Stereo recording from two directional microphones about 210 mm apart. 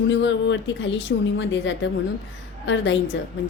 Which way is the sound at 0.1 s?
60° left (ahead or behind).